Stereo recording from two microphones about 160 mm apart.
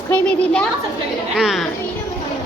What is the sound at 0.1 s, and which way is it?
A woman's voice, 10° left (ahead or behind).